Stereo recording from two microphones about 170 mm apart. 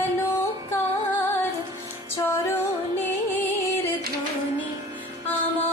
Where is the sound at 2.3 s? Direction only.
15° left (ahead or behind).